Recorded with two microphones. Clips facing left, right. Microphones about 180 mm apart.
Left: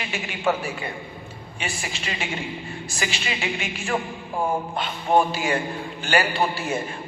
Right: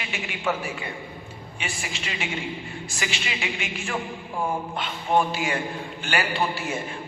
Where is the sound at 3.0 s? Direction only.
35° left (ahead or behind).